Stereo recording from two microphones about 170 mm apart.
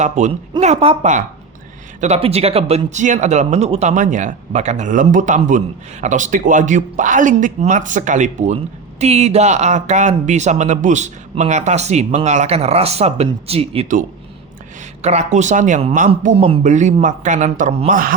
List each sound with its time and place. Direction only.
0.0 s speech: 45° right (ahead or behind)
15.0 s speech: 45° right (ahead or behind)